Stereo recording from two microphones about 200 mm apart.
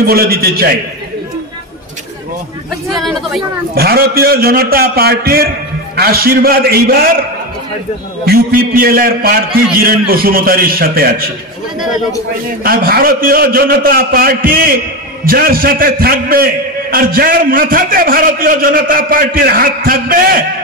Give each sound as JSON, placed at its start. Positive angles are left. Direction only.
{"t": 0.0, "sound": "a man's voice", "side_deg": -50}
{"t": 3.0, "sound": "speech", "side_deg": 0}
{"t": 3.7, "sound": "a man's voice", "side_deg": -50}
{"t": 8.3, "sound": "a man's voice", "side_deg": -45}
{"t": 12.6, "sound": "a man's voice", "side_deg": -45}